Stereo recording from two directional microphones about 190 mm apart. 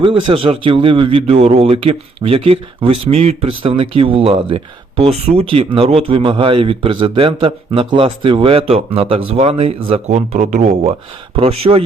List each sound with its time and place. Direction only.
0.0 s a man's voice: 25° right (ahead or behind)